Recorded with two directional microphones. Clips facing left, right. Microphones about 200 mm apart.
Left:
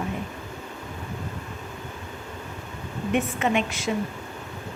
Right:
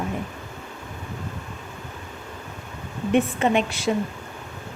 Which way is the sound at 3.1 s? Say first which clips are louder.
Right 4 dB; 35° right (ahead or behind).